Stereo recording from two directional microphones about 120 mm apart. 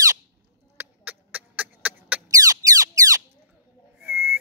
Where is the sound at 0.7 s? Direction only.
15° right (ahead or behind).